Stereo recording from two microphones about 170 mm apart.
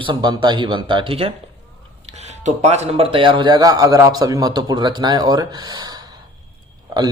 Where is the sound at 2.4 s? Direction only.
40° right (ahead or behind); by 5.8 s 25° right (ahead or behind).